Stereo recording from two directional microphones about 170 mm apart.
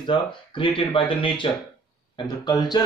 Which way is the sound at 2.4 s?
25° left (ahead or behind).